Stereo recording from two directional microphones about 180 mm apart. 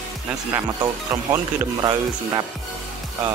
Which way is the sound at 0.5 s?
15° right (ahead or behind).